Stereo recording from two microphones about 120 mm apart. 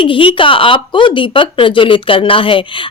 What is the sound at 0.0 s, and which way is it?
Speech, 45° left (ahead or behind).